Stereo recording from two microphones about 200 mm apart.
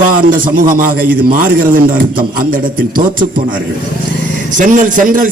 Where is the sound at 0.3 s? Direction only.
45° right (ahead or behind).